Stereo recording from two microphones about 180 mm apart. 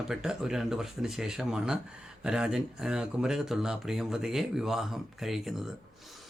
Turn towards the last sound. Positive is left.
turn(degrees=0)  # may be behind; listen again after turning